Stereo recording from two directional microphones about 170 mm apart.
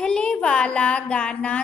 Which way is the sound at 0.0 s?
5° left (ahead or behind).